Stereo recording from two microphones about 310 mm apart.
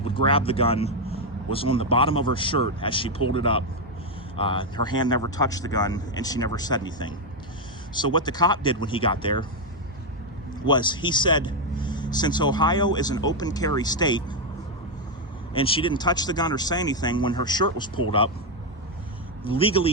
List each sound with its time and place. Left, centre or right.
0.1 s speech: centre
10.7 s speech: centre
15.5 s speech: centre
19.5 s speech: centre